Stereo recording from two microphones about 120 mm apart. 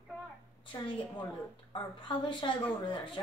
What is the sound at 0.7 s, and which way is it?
Speech, 45° left (ahead or behind).